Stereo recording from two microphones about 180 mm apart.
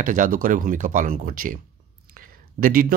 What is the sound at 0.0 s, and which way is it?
Speech, 50° right (ahead or behind).